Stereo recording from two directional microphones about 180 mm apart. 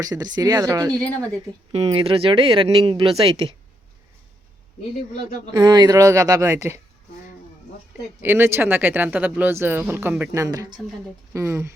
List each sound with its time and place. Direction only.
0.0 s a man's voice: 20° right (ahead or behind)
0.9 s a woman's voice: 5° left (ahead or behind)
1.7 s speech: 35° right (ahead or behind)
5.1 s a man's voice: 25° right (ahead or behind)
8.2 s speech: 10° right (ahead or behind)